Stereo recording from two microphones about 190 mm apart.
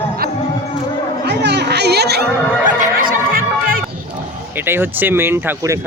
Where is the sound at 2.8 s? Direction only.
45° right (ahead or behind).